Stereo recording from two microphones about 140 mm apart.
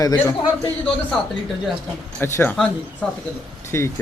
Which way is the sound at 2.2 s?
15° left (ahead or behind).